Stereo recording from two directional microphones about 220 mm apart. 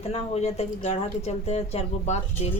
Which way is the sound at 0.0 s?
30° left (ahead or behind).